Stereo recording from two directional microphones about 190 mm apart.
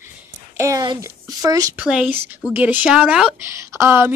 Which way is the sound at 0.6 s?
20° right (ahead or behind).